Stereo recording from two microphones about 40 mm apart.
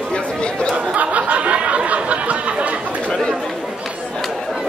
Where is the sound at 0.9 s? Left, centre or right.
Right.